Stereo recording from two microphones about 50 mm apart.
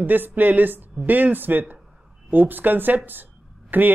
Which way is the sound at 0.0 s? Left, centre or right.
Right.